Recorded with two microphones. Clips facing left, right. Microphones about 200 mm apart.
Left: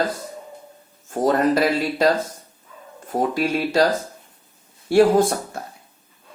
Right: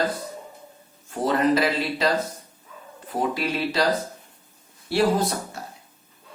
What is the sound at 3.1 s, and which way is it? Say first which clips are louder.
Speech: left 4 dB; 45° left (ahead or behind).